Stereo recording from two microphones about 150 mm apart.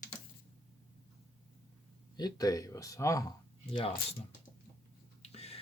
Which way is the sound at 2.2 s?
25° left (ahead or behind).